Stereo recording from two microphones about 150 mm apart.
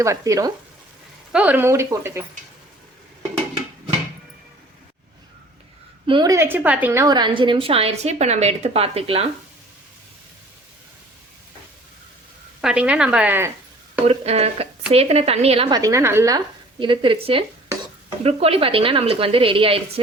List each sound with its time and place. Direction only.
0.0 s a woman's voice: 20° right (ahead or behind)
1.3 s speech: 10° right (ahead or behind)
6.1 s a woman's voice: 30° right (ahead or behind)
6.3 s a woman's voice: 15° right (ahead or behind); by 9.2 s 40° right (ahead or behind)
12.6 s speech: 5° right (ahead or behind)
14.1 s a woman's voice: 45° right (ahead or behind)
15.7 s a woman's voice: 20° right (ahead or behind)
16.8 s a woman's voice: 35° right (ahead or behind)